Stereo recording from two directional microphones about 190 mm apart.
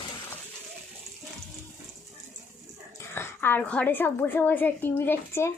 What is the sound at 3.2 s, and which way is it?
A woman's voice, 10° left (ahead or behind).